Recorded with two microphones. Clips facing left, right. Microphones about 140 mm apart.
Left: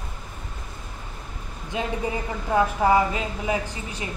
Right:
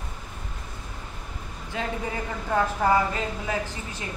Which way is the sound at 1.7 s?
15° left (ahead or behind).